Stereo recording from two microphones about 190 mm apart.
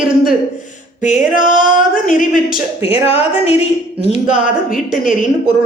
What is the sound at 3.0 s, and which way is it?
A woman's voice, 35° left (ahead or behind).